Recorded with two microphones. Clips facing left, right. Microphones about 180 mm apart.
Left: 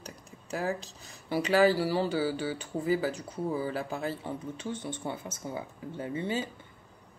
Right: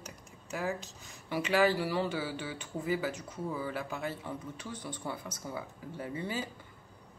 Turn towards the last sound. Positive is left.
turn(degrees=25)  # may be behind; listen again after turning